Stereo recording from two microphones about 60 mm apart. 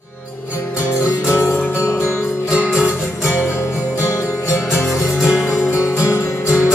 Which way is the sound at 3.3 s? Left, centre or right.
Left.